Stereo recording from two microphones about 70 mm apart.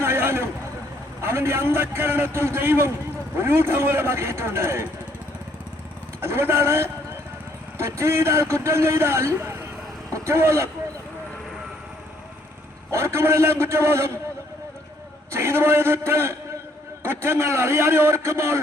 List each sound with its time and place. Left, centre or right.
0.0 s a sound: right
1.2 s a man's voice: right
6.2 s a man's voice: right
12.9 s a man's voice: right
15.3 s a man's voice: right